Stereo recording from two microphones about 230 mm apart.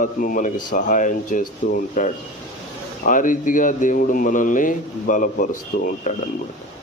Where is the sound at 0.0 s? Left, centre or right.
Left.